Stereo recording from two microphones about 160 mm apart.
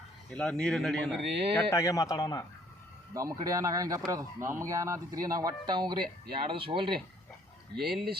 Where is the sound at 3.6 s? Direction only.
20° right (ahead or behind).